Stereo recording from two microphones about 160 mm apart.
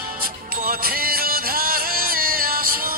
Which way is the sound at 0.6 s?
65° right (ahead or behind).